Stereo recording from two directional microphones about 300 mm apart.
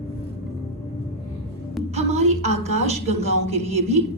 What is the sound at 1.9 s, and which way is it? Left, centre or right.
A woman's voice, right.